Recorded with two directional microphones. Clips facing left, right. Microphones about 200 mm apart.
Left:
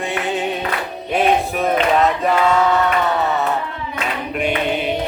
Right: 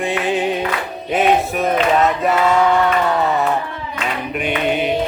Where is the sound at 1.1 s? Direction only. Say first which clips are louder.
Right 1 dB; centre (ahead or behind).